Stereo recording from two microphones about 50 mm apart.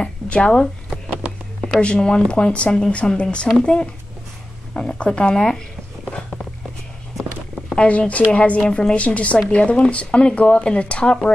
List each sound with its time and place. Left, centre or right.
0.0 s speech: centre
1.8 s speech: centre
6.0 s a sound: left
7.7 s speech: left